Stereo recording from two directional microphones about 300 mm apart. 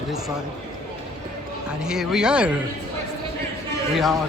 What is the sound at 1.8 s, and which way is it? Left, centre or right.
Speech, centre.